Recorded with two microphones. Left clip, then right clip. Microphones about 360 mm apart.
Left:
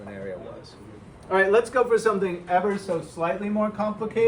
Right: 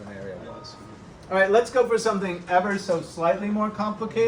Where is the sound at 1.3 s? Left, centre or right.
Centre.